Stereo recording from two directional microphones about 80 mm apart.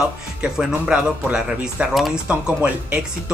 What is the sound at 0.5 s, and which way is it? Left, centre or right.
Speech, centre.